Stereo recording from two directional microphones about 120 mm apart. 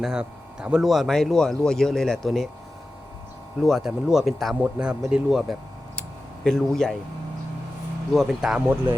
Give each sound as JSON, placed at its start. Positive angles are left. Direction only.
{"t": 0.0, "sound": "speech", "side_deg": -5}
{"t": 3.6, "sound": "speech", "side_deg": 0}
{"t": 6.0, "sound": "a sound", "side_deg": 5}
{"t": 8.1, "sound": "speech", "side_deg": 0}